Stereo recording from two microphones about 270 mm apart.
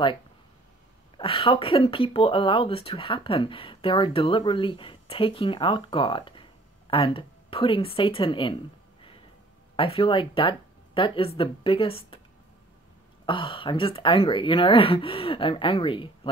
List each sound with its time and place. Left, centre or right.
1.1 s speech: centre
9.8 s speech: centre
13.2 s speech: centre